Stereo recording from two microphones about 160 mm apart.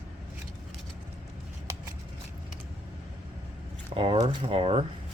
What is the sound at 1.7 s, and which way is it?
Shuffling cards, 20° right (ahead or behind).